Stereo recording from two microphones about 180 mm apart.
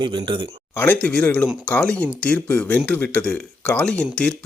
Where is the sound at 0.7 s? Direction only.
10° left (ahead or behind).